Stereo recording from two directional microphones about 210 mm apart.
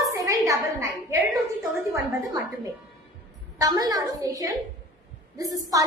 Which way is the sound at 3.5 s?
20° right (ahead or behind).